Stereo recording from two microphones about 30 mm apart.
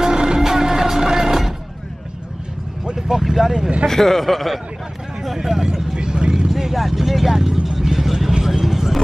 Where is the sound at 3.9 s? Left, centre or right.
Centre.